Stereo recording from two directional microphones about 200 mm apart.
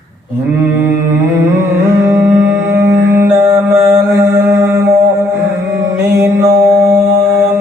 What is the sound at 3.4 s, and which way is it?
Mantra, 15° right (ahead or behind).